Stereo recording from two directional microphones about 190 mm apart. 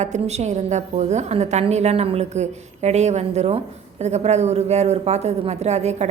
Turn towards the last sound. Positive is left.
turn(degrees=-35)  # may be behind; listen again after turning